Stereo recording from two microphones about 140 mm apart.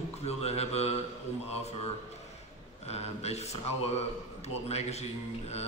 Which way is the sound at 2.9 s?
50° left (ahead or behind).